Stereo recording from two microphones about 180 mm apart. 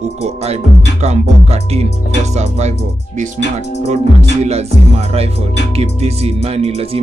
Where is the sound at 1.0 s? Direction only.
35° right (ahead or behind).